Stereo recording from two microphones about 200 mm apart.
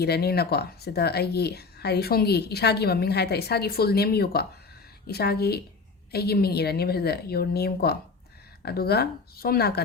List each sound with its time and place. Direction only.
0.0 s speech: 50° left (ahead or behind)